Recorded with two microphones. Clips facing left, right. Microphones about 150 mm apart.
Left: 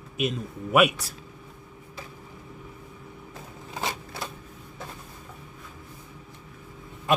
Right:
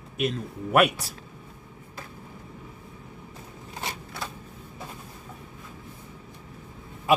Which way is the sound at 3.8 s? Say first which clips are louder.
Left 4 dB; 90° left.